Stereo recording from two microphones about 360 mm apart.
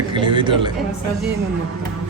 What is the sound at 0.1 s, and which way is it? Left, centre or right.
Speech, centre.